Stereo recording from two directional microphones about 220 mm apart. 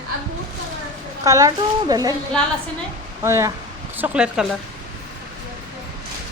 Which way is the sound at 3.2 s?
10° right (ahead or behind).